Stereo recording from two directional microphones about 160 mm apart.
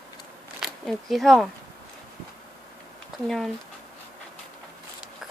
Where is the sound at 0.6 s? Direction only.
Centre (ahead or behind).